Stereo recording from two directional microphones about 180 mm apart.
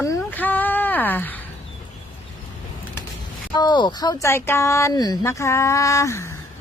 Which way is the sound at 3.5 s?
25° left (ahead or behind).